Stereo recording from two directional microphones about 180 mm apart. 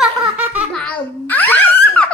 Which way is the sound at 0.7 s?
10° left (ahead or behind).